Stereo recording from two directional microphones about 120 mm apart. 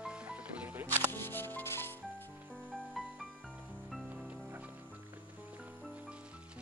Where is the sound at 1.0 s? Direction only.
20° left (ahead or behind).